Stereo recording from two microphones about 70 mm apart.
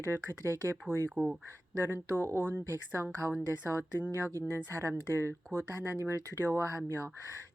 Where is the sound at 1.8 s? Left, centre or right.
Right.